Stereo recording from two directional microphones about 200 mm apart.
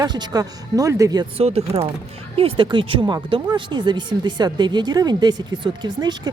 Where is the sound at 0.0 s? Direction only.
20° right (ahead or behind).